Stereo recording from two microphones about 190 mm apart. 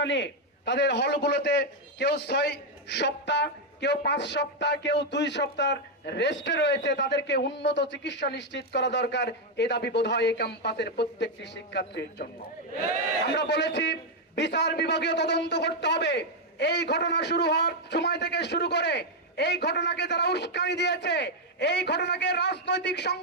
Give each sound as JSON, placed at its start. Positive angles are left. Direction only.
{"t": 0.0, "sound": "a man's voice", "side_deg": 70}